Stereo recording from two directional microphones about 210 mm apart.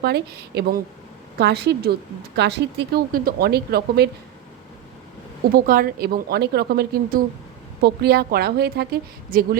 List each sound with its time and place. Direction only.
0.0 s speech: 50° right (ahead or behind)
5.5 s speech: 45° right (ahead or behind)